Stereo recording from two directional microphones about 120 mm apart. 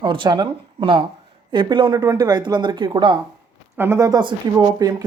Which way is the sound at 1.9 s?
30° right (ahead or behind).